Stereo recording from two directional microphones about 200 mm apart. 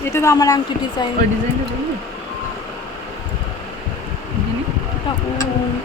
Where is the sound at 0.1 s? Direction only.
15° left (ahead or behind).